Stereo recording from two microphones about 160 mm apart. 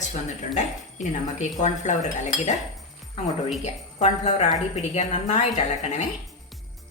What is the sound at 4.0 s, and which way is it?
Speech, 45° left (ahead or behind).